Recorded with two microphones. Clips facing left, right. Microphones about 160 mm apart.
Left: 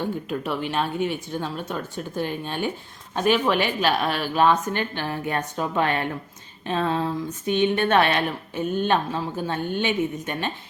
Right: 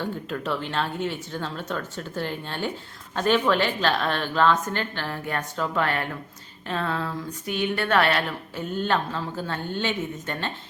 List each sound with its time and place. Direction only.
0.0 s a woman's voice: 15° left (ahead or behind)